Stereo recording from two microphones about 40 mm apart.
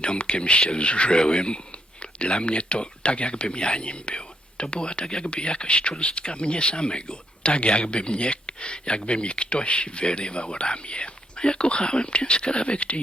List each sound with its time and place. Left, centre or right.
0.0 s speech: left